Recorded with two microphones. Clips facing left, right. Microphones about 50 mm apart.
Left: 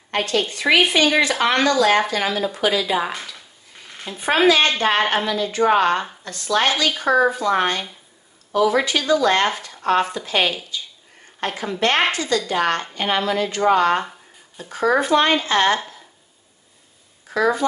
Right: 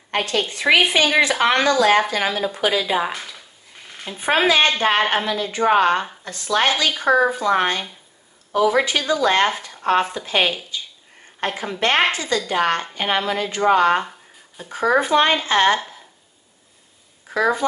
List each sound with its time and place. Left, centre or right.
0.1 s speech: centre
3.9 s a sound: centre
4.2 s a woman's voice: right
17.3 s speech: right